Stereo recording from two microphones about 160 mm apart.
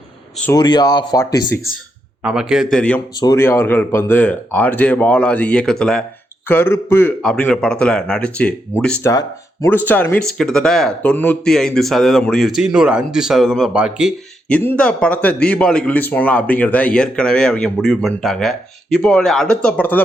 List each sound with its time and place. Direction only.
0.5 s speech: 25° left (ahead or behind)
2.2 s speech: 5° right (ahead or behind)
3.2 s a man's voice: 20° left (ahead or behind)
9.0 s speech: 20° left (ahead or behind); by 14.1 s 5° right (ahead or behind)
14.4 s a man's voice: 10° left (ahead or behind)